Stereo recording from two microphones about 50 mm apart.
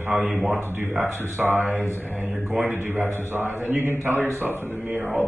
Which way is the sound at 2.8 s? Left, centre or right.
Right.